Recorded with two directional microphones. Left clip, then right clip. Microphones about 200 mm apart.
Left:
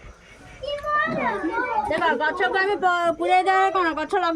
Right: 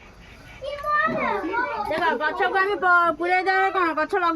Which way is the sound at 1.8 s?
Centre (ahead or behind).